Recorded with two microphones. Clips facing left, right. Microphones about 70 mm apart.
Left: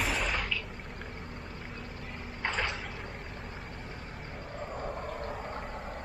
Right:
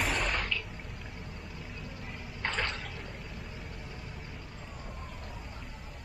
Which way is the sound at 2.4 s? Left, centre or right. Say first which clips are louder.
Left 1 dB; centre.